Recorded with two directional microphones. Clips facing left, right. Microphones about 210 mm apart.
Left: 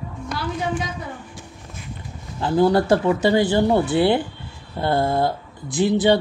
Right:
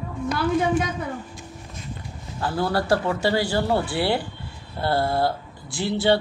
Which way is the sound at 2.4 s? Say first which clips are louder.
Left 7 dB; 20° left (ahead or behind).